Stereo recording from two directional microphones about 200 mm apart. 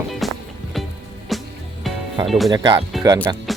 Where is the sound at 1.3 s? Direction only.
Centre (ahead or behind).